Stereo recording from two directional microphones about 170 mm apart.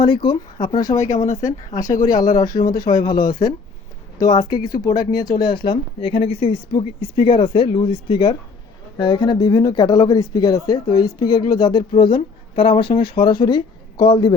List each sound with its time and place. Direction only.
0.0 s speech: 30° left (ahead or behind)
1.0 s speech: 45° left (ahead or behind)
2.2 s speech: 20° left (ahead or behind)